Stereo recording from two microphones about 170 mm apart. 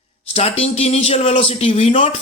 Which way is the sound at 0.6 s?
35° left (ahead or behind).